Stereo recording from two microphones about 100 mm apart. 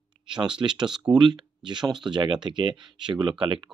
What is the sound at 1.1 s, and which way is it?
Speech, 50° right (ahead or behind).